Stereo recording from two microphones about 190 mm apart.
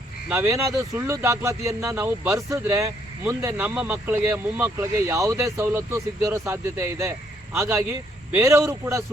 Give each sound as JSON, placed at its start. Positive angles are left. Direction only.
{"t": 0.3, "sound": "speech", "side_deg": -15}